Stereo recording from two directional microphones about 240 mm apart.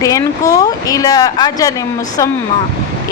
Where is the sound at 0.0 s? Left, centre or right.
Centre.